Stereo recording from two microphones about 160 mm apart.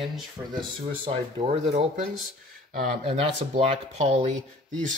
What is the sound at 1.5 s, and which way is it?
Speech, 50° right (ahead or behind).